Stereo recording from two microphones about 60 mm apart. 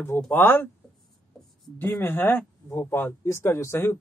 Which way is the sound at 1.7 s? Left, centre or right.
Left.